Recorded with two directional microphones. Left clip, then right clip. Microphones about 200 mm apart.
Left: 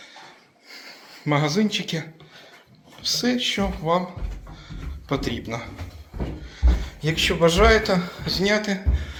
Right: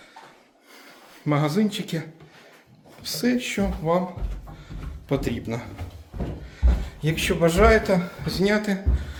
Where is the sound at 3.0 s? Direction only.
15° right (ahead or behind).